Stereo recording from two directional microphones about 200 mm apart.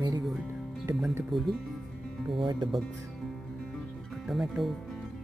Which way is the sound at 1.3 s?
Centre (ahead or behind).